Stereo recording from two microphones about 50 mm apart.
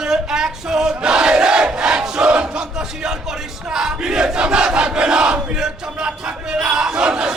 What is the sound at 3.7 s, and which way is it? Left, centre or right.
Battle cry, centre.